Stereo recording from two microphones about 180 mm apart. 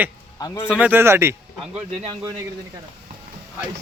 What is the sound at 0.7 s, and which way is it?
Speech, 10° right (ahead or behind).